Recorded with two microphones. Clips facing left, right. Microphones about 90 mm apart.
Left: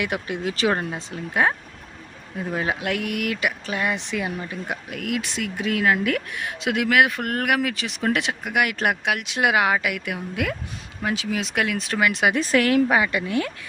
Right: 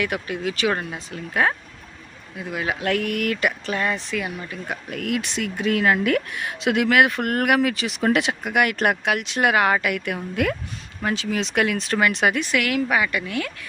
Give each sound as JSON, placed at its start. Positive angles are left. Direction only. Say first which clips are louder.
{"t": 0.0, "sound": "speech", "louder": "right 1 dB", "side_deg": 25}
{"t": 2.3, "sound": "speech", "louder": "left 1 dB", "side_deg": 35}
{"t": 2.8, "sound": "speech", "louder": "right 3 dB", "side_deg": 15}
{"t": 4.9, "sound": "a woman's voice", "louder": "right 4 dB", "side_deg": 5}
{"t": 12.3, "sound": "speech", "louder": "left 3 dB", "side_deg": 35}